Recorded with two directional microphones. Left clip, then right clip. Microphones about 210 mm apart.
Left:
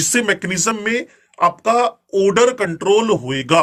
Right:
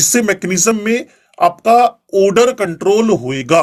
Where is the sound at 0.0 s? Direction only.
35° right (ahead or behind).